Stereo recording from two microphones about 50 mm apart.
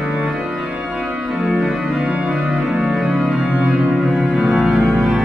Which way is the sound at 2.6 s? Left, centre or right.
Centre.